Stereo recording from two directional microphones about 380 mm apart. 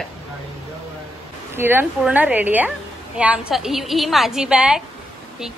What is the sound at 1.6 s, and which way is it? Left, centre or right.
Speech, centre.